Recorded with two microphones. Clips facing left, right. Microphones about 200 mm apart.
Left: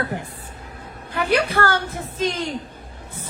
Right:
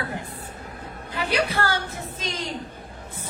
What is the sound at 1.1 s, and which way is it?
Speech, 55° left (ahead or behind).